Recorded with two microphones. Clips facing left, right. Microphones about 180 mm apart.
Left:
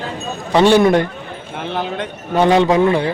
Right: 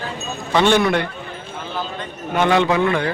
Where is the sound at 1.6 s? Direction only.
70° left (ahead or behind).